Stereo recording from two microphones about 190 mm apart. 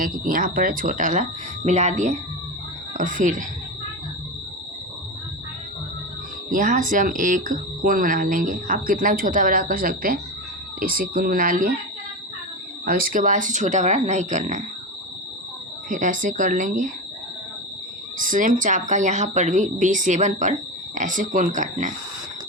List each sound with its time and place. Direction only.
0.0 s speech: 50° right (ahead or behind)
6.5 s speech: 45° right (ahead or behind)
12.8 s speech: 50° right (ahead or behind)
15.9 s speech: 45° right (ahead or behind)
18.2 s speech: 45° right (ahead or behind)